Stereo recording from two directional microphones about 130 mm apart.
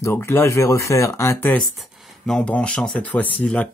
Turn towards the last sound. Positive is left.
turn(degrees=10)  # may be behind; listen again after turning